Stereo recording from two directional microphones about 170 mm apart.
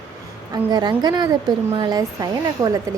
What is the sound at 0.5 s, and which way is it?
Speech, 25° right (ahead or behind).